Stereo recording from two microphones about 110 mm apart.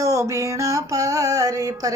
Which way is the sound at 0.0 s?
30° right (ahead or behind).